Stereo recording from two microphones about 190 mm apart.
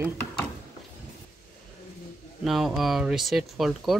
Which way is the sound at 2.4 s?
Centre (ahead or behind).